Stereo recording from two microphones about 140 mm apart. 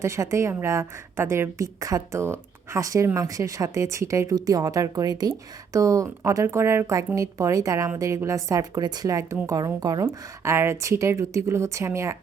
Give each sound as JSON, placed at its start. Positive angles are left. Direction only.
{"t": 0.0, "sound": "speech", "side_deg": -20}